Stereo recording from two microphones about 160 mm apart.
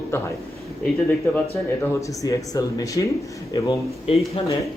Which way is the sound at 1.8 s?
20° left (ahead or behind).